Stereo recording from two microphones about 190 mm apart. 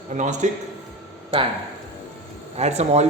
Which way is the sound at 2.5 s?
35° right (ahead or behind).